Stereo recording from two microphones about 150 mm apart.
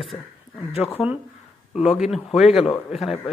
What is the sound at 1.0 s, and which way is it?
A man's voice, 5° right (ahead or behind).